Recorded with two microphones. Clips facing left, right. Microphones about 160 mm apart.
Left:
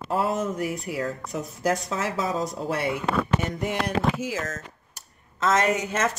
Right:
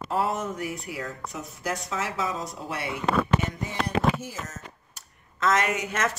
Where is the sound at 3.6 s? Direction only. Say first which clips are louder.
Left 1 dB; 90° left.